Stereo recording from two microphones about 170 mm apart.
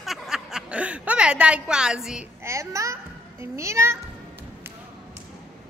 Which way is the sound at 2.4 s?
15° right (ahead or behind).